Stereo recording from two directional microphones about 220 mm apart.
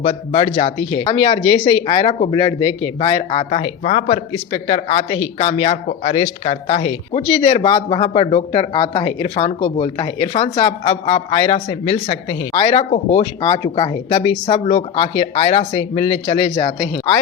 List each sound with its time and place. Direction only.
0.0 s speech: 30° left (ahead or behind)